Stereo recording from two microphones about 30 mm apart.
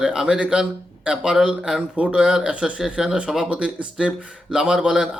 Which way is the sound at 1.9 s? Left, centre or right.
Right.